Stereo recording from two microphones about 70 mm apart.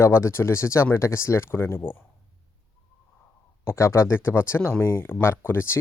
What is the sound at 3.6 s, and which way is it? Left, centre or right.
Speech, left.